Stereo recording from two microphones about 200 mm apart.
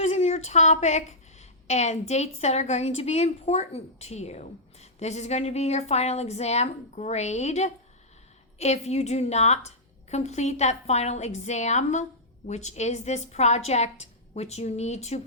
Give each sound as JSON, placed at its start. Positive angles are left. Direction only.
{"t": 0.0, "sound": "a woman's voice", "side_deg": 35}